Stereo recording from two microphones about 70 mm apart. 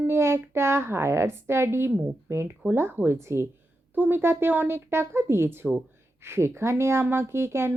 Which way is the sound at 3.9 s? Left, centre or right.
Right.